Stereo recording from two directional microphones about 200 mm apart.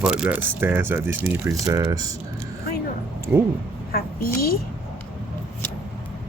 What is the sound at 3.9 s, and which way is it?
Speech, 50° left (ahead or behind).